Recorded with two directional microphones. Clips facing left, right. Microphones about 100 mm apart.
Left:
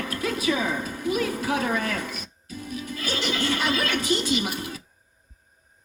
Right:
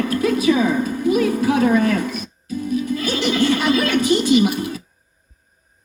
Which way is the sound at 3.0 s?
20° right (ahead or behind).